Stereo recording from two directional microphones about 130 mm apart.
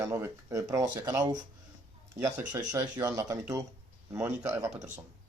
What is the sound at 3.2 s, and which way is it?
Speech, 25° right (ahead or behind).